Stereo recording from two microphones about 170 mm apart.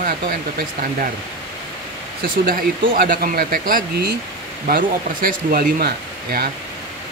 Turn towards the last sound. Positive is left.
turn(degrees=-65)  # may be behind; listen again after turning